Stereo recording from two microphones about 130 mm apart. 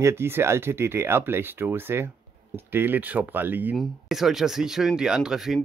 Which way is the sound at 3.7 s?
Centre (ahead or behind).